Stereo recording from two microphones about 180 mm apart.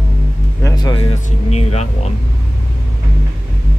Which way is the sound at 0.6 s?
20° left (ahead or behind).